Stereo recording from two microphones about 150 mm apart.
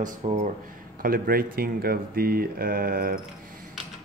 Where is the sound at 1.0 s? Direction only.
75° right (ahead or behind).